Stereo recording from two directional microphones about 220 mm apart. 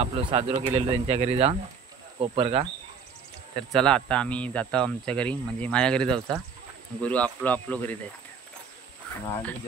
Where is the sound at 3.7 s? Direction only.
5° left (ahead or behind).